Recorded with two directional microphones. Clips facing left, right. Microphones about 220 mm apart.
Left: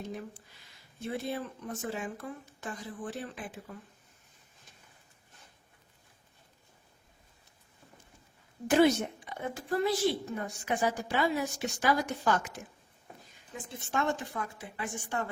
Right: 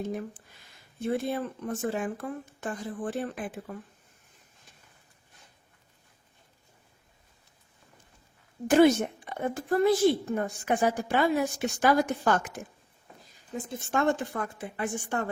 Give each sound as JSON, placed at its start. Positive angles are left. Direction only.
{"t": 0.0, "sound": "a woman's voice", "side_deg": -50}
{"t": 8.7, "sound": "a woman's voice", "side_deg": -50}